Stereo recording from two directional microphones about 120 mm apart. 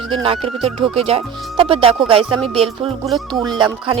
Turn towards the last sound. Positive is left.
turn(degrees=-35)  # may be behind; listen again after turning